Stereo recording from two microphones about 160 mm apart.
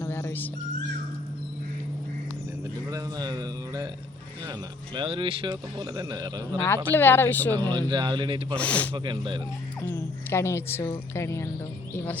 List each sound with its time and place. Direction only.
0.0 s dog: 15° left (ahead or behind)
2.9 s speech: 25° right (ahead or behind)
4.9 s speech: 30° right (ahead or behind)
6.7 s speech: 15° left (ahead or behind)
7.5 s speech: 25° right (ahead or behind)
8.5 s speech: 10° left (ahead or behind)
8.9 s speech: 30° right (ahead or behind)
9.8 s speech: 15° left (ahead or behind)